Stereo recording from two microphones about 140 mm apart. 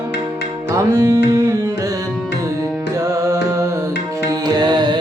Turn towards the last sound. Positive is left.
turn(degrees=-30)  # may be behind; listen again after turning